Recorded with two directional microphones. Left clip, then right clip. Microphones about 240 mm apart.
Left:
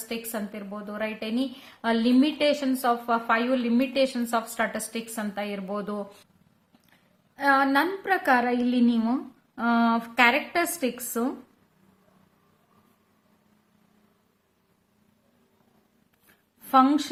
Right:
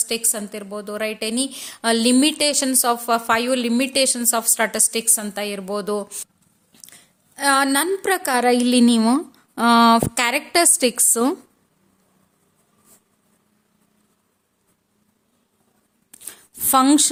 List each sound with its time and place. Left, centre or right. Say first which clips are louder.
0.1 s a woman's voice: right 8 dB; right
7.3 s a woman's voice: right 4 dB; right
16.7 s a woman's voice: right 4 dB; right